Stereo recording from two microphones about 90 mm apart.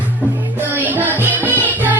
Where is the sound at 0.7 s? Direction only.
20° right (ahead or behind).